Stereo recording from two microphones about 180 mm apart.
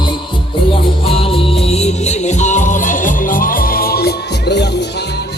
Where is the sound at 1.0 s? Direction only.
30° left (ahead or behind); by 4.9 s 70° left (ahead or behind).